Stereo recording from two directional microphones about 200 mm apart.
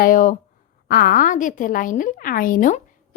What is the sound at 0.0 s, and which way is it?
A woman's voice, 40° left (ahead or behind).